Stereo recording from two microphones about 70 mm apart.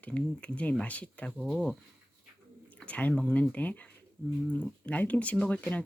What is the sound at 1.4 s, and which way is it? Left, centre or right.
Speech, centre.